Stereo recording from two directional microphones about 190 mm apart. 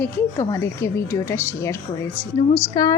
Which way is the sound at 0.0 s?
15° left (ahead or behind).